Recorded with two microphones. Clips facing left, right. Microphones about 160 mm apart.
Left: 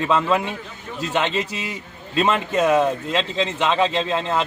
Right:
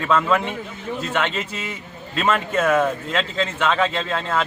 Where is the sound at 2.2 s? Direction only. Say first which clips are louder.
Even; 15° left (ahead or behind).